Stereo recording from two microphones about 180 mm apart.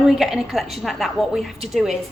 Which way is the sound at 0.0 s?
5° right (ahead or behind).